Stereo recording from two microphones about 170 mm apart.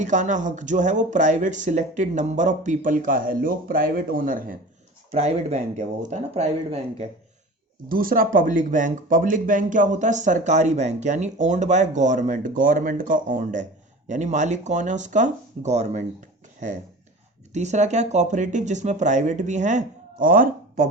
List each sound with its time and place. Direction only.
0.0 s speech: 45° right (ahead or behind)
5.1 s speech: 40° right (ahead or behind)
7.9 s speech: 55° right (ahead or behind)
17.5 s speech: 40° right (ahead or behind)